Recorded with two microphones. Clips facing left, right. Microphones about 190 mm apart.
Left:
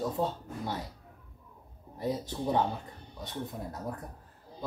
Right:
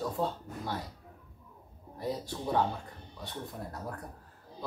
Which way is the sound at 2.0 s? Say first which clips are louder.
Left 3 dB; 20° left (ahead or behind).